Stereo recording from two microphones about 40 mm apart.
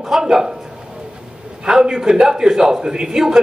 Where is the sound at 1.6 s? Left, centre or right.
Centre.